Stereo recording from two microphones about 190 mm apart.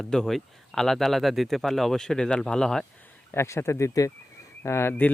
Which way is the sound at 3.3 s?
15° left (ahead or behind).